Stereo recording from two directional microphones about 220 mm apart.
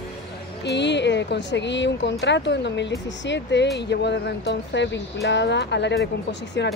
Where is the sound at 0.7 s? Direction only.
50° left (ahead or behind).